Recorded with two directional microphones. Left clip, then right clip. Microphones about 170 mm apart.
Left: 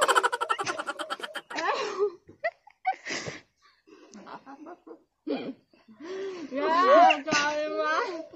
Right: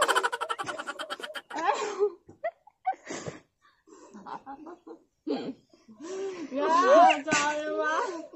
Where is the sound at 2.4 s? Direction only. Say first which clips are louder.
Left 2 dB; 15° right (ahead or behind).